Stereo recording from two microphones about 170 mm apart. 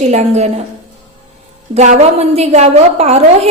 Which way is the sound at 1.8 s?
40° right (ahead or behind).